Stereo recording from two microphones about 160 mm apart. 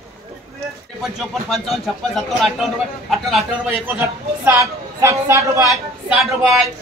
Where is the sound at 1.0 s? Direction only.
Centre (ahead or behind).